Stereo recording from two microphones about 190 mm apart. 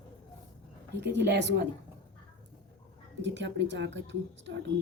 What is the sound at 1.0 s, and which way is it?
Speech, 65° right (ahead or behind).